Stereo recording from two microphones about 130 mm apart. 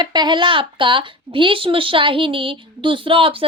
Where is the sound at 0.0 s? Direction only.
35° right (ahead or behind).